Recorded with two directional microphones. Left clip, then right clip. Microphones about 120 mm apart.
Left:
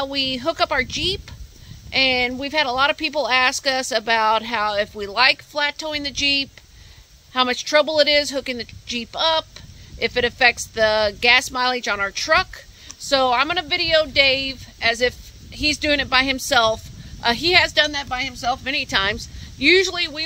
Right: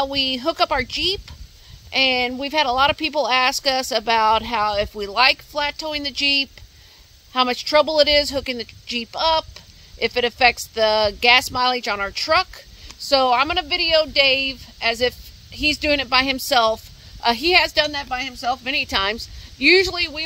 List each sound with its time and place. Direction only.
0.0 s a woman's voice: 35° right (ahead or behind)